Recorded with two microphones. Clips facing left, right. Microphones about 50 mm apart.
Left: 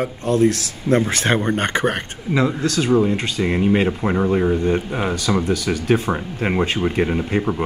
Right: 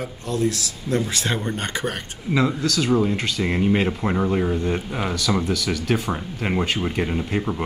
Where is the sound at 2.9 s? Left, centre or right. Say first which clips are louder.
Left 4 dB; centre.